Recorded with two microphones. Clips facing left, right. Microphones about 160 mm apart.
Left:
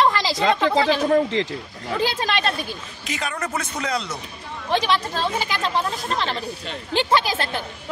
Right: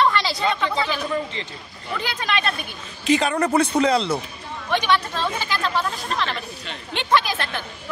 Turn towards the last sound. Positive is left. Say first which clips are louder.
# even
turn(degrees=30)  # may be behind; listen again after turning